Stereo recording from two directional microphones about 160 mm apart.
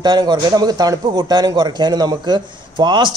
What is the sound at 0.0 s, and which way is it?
Speech, 25° right (ahead or behind).